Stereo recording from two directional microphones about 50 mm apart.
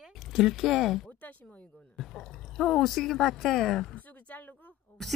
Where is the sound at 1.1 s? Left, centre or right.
Left.